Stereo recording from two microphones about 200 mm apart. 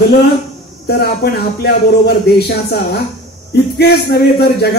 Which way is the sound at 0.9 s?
55° left (ahead or behind).